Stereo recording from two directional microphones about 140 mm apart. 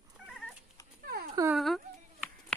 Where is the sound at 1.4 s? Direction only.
25° right (ahead or behind).